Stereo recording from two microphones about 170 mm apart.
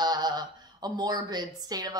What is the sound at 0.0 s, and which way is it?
A woman's voice, 25° right (ahead or behind).